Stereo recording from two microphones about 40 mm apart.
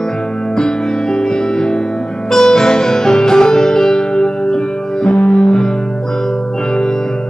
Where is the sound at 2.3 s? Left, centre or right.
Centre.